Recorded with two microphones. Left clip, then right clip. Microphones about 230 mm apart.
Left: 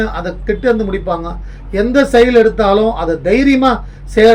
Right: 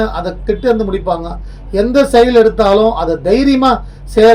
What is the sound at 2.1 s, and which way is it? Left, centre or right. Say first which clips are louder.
Speech: even; centre.